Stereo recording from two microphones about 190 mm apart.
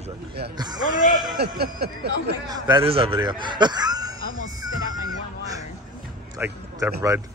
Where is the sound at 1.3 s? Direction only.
60° right (ahead or behind).